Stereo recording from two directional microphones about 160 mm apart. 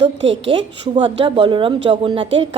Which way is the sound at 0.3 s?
35° right (ahead or behind).